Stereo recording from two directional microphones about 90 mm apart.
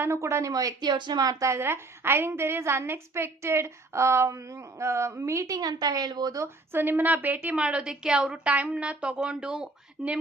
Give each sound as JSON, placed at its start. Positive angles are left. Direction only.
{"t": 0.0, "sound": "a woman's voice", "side_deg": -30}
{"t": 0.5, "sound": "a woman's voice", "side_deg": -50}
{"t": 6.4, "sound": "a woman's voice", "side_deg": -25}
{"t": 7.6, "sound": "a woman's voice", "side_deg": -10}